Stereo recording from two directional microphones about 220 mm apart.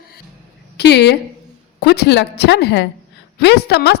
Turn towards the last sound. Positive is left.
turn(degrees=50)  # may be behind; listen again after turning